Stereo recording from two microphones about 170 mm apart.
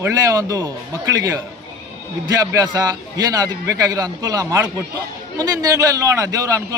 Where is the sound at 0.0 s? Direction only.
20° right (ahead or behind).